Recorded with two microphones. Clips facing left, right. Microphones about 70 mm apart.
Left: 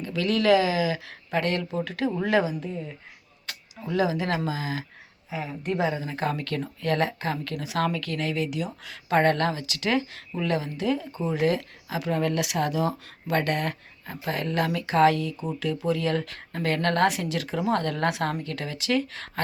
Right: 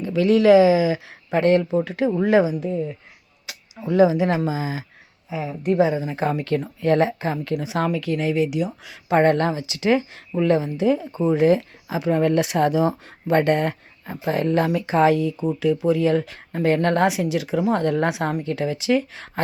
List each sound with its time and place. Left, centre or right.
0.0 s speech: right
3.5 s a sound: centre
3.8 s speech: right
5.3 s a woman's voice: centre
5.9 s speech: centre